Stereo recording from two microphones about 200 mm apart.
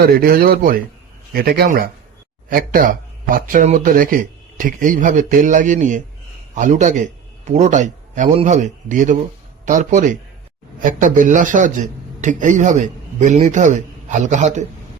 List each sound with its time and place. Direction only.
0.0 s a man's voice: 50° right (ahead or behind)